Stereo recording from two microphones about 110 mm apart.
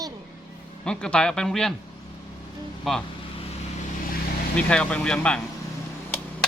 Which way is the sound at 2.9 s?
5° left (ahead or behind).